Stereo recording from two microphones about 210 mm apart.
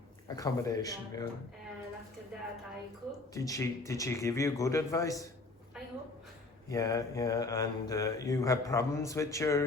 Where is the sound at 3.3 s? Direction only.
15° left (ahead or behind).